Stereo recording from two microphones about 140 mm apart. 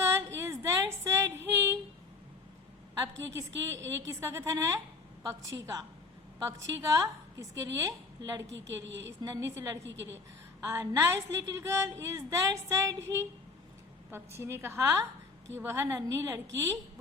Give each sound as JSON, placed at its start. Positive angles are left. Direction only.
{"t": 0.0, "sound": "a sound", "side_deg": -20}
{"t": 3.0, "sound": "a woman's voice", "side_deg": -20}
{"t": 14.1, "sound": "a woman's voice", "side_deg": -20}